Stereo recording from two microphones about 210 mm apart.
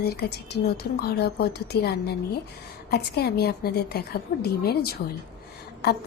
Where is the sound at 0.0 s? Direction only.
50° left (ahead or behind).